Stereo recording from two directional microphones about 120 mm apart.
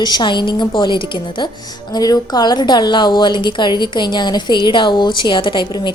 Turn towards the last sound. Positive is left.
turn(degrees=40)  # may be behind; listen again after turning